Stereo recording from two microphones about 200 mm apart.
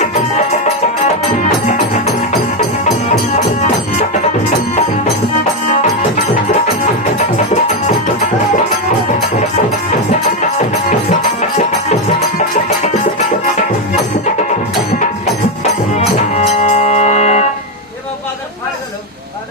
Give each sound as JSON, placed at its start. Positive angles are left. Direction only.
{"t": 0.0, "sound": "music", "side_deg": 35}
{"t": 5.6, "sound": "music", "side_deg": 35}
{"t": 7.3, "sound": "music", "side_deg": 35}
{"t": 10.1, "sound": "music", "side_deg": 35}
{"t": 15.6, "sound": "music", "side_deg": 35}